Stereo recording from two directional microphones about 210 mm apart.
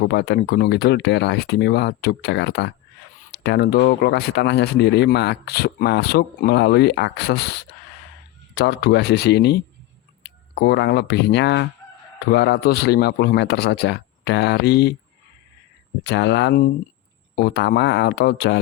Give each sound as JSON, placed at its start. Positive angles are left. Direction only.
{"t": 0.0, "sound": "speech", "side_deg": 50}
{"t": 16.0, "sound": "speech", "side_deg": 55}